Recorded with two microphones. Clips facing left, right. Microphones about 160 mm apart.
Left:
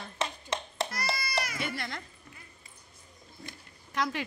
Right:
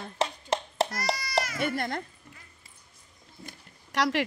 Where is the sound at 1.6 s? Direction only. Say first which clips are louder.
Right 7 dB; 50° right (ahead or behind).